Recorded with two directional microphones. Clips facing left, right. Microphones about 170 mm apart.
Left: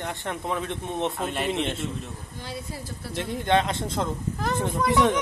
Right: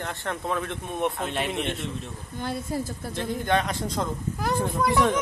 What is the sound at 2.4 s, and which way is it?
Speech, 50° right (ahead or behind).